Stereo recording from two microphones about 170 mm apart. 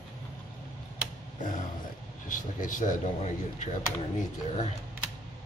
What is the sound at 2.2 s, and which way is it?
Speech, 50° left (ahead or behind).